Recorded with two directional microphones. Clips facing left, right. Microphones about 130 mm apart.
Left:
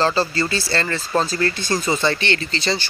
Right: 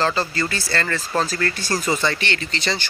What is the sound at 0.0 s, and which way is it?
Speech, 30° left (ahead or behind).